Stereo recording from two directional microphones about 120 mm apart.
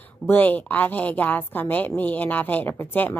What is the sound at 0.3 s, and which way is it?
Speech, 15° left (ahead or behind).